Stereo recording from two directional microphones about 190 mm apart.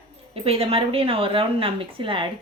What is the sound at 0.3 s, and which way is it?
Speech, 30° right (ahead or behind).